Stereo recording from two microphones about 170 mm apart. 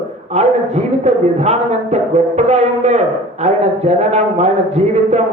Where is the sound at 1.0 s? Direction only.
40° right (ahead or behind).